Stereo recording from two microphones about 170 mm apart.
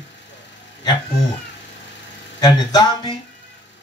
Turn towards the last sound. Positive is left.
turn(degrees=25)  # may be behind; listen again after turning